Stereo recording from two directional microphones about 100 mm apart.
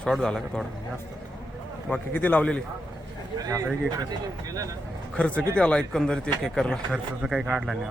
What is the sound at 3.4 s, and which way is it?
Speech, 35° right (ahead or behind).